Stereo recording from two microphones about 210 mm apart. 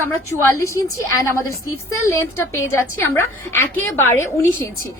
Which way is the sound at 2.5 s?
10° left (ahead or behind).